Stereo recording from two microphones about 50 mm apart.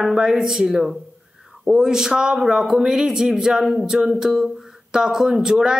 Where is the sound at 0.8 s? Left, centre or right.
Centre.